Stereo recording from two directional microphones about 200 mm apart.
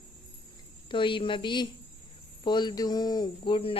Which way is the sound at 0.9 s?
25° left (ahead or behind).